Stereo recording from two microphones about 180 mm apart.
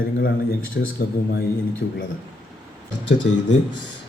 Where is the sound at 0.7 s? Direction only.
70° left (ahead or behind).